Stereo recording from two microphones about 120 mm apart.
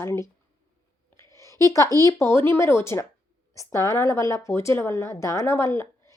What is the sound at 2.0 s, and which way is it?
Speech, 25° left (ahead or behind).